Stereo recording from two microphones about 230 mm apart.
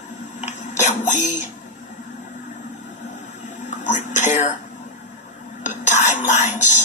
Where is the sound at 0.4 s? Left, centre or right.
Left.